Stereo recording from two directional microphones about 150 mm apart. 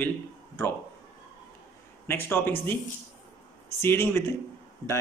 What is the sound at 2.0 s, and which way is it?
Speech, 15° left (ahead or behind).